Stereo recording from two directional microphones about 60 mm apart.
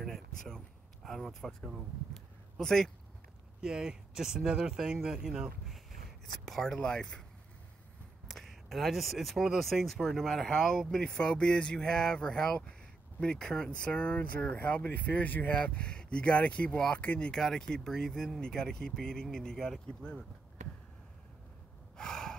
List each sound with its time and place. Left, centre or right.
0.0 s speech: centre
3.6 s speech: centre
6.4 s speech: centre
8.3 s speech: centre
21.9 s gasp: centre